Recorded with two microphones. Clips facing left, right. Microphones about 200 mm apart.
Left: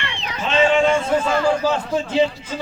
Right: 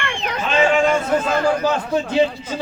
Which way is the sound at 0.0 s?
55° right (ahead or behind).